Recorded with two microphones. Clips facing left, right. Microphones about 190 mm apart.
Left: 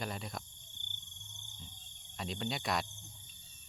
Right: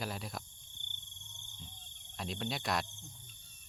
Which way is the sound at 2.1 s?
Centre (ahead or behind).